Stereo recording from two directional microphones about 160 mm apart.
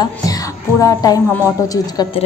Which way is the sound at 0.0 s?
20° left (ahead or behind).